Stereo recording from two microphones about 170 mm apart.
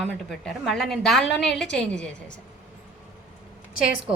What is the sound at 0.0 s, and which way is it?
A woman's voice, centre (ahead or behind).